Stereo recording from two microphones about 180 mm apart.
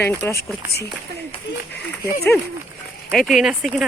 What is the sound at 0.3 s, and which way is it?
Speech, 60° left (ahead or behind).